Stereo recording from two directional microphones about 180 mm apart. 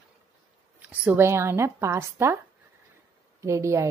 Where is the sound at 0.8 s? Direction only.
10° right (ahead or behind).